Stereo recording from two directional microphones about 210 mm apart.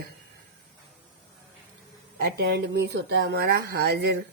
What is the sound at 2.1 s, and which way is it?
Speech, 50° right (ahead or behind).